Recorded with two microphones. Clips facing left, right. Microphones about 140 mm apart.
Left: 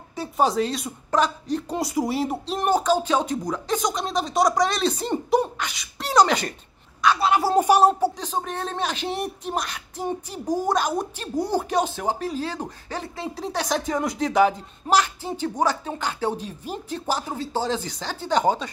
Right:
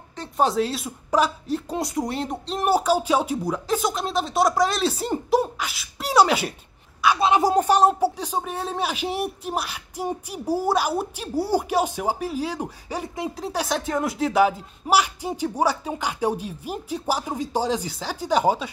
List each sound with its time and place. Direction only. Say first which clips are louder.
0.1 s speech: even; 5° left (ahead or behind)
2.7 s speech: right 1 dB; 10° right (ahead or behind)
7.2 s a woman's voice: right 2 dB; 20° right (ahead or behind)
7.5 s speech: left 1 dB; 5° left (ahead or behind)
7.9 s speech: right 1 dB; 10° right (ahead or behind)